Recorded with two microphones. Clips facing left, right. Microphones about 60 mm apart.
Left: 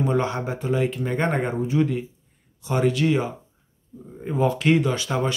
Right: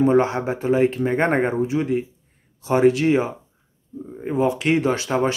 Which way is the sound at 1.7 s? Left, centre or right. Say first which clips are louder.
Right 1 dB; right.